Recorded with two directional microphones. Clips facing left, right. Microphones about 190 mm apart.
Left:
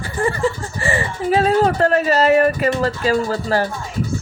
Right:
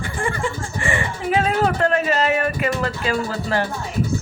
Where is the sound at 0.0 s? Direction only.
35° left (ahead or behind).